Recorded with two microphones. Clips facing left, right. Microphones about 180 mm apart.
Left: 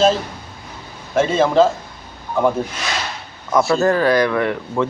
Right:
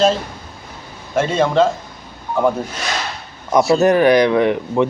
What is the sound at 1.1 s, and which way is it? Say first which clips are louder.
Speech: left 1 dB; centre (ahead or behind).